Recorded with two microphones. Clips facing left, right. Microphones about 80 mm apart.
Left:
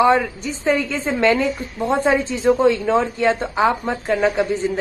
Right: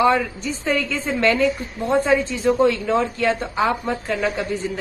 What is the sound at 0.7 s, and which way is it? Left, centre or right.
Speech, left.